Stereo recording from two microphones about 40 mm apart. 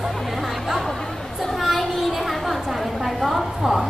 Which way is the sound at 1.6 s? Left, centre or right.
Centre.